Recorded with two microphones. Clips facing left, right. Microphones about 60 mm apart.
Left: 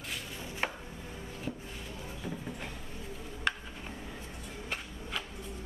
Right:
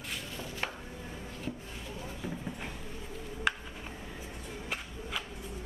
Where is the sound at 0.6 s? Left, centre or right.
Left.